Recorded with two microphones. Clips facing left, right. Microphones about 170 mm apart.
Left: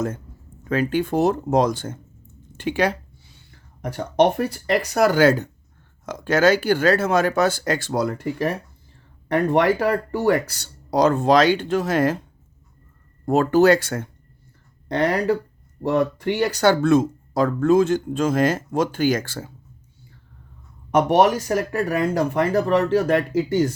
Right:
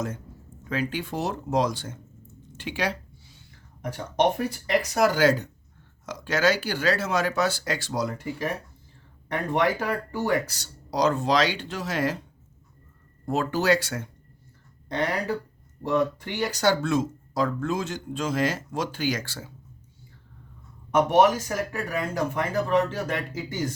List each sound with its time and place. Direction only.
0.7 s speech: 50° left (ahead or behind)
2.6 s a sound: 50° left (ahead or behind)
3.8 s speech: 65° left (ahead or behind); by 12.2 s 50° left (ahead or behind)
13.2 s speech: 50° left (ahead or behind)
14.8 s speech: 65° left (ahead or behind)
20.9 s speech: 65° left (ahead or behind)